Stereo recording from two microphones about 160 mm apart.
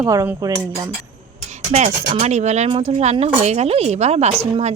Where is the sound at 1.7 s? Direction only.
40° right (ahead or behind).